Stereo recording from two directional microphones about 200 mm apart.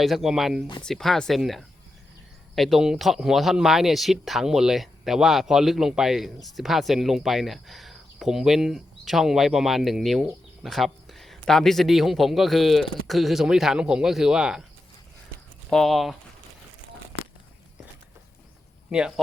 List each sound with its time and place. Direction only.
0.0 s speech: centre (ahead or behind)
15.7 s speech: centre (ahead or behind)
18.9 s speech: 5° right (ahead or behind)